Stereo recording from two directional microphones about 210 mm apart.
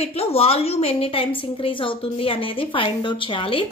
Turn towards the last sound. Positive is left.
turn(degrees=25)  # may be behind; listen again after turning